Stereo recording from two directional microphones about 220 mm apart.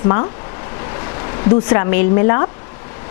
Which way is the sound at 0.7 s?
20° left (ahead or behind).